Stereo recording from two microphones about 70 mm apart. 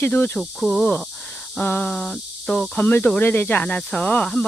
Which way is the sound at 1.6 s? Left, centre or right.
Left.